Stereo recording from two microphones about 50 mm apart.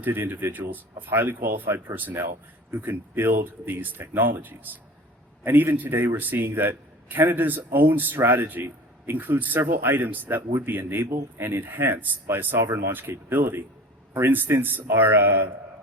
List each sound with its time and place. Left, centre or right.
0.0 s a man's voice: right